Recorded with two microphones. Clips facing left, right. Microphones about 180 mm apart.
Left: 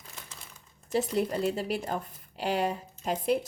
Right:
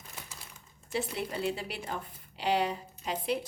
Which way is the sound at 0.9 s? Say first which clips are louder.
Left 6 dB; 40° left (ahead or behind).